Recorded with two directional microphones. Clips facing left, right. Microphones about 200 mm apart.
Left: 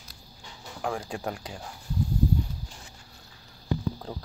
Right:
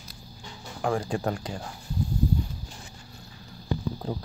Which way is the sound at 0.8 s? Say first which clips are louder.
Right 5 dB; 5° left (ahead or behind).